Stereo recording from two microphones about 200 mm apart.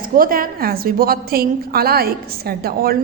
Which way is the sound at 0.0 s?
45° right (ahead or behind).